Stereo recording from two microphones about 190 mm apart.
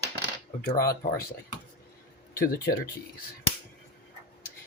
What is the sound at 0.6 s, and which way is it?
Speech, 50° left (ahead or behind).